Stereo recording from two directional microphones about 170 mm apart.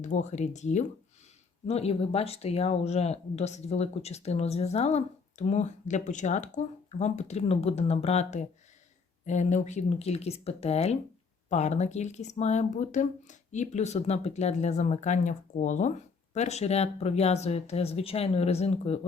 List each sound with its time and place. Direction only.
0.0 s speech: 45° left (ahead or behind)